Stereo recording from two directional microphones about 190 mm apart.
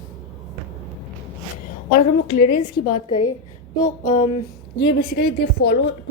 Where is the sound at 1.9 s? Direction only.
50° left (ahead or behind).